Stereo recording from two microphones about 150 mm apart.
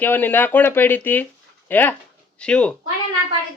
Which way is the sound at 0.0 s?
10° left (ahead or behind).